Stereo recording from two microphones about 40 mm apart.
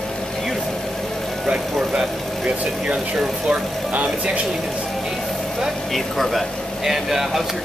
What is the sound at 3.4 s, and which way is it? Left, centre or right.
Speech, right.